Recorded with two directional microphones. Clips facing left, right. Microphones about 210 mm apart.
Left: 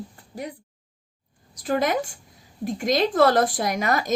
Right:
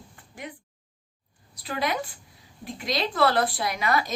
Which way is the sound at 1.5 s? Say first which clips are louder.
Left 6 dB; 45° left (ahead or behind).